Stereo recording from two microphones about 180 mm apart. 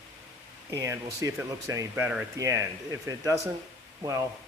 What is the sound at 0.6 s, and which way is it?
Speech, 15° right (ahead or behind).